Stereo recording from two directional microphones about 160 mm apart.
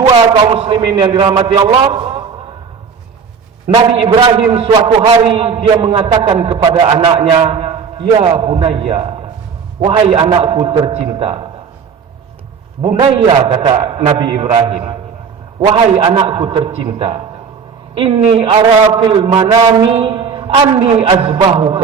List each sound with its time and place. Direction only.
0.0 s a man's voice: 30° right (ahead or behind)
3.9 s a man's voice: 35° right (ahead or behind)
4.7 s a man's voice: 25° right (ahead or behind)
5.2 s a man's voice: 35° right (ahead or behind)
12.9 s a man's voice: 35° right (ahead or behind)
16.1 s a man's voice: 35° right (ahead or behind)
20.8 s a man's voice: 35° right (ahead or behind)